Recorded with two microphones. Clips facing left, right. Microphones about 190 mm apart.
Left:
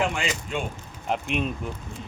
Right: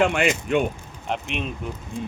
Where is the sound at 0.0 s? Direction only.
65° right (ahead or behind).